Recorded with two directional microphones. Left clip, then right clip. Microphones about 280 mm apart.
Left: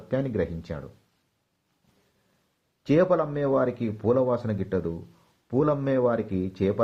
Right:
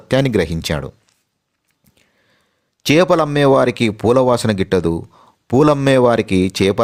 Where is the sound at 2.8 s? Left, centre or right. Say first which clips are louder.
Right 9 dB; right.